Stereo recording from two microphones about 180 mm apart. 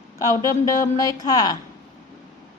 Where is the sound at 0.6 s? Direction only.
20° left (ahead or behind).